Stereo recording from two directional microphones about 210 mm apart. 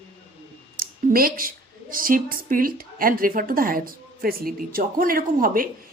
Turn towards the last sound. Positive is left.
turn(degrees=-40)  # may be behind; listen again after turning